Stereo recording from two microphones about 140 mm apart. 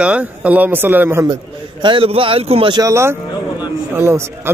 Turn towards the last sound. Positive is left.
turn(degrees=-20)  # may be behind; listen again after turning